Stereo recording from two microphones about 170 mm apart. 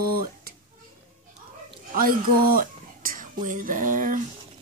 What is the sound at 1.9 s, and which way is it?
Speech, 55° right (ahead or behind).